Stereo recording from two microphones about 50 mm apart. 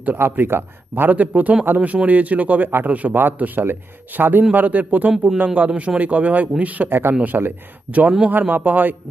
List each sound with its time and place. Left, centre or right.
0.0 s a man's voice: right
6.8 s speech: right
7.1 s speech: right